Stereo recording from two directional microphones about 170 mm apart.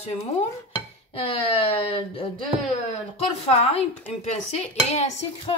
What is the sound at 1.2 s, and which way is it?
Dishes, 35° left (ahead or behind).